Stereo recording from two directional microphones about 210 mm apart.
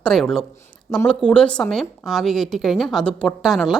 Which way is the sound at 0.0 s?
Centre (ahead or behind).